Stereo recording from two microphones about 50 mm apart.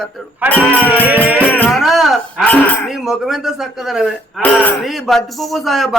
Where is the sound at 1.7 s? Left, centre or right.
Centre.